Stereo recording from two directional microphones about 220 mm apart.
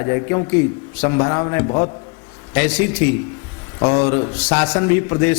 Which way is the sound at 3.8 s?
25° left (ahead or behind).